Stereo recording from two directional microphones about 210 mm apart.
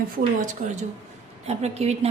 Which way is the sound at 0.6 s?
35° right (ahead or behind).